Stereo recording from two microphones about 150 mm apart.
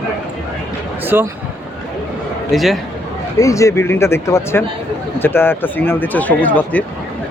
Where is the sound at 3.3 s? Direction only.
20° left (ahead or behind).